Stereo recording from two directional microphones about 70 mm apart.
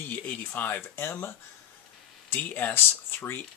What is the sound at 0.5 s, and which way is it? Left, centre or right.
Speech, left.